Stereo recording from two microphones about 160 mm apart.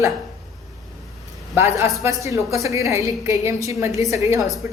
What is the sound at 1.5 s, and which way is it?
A woman's voice, 15° right (ahead or behind).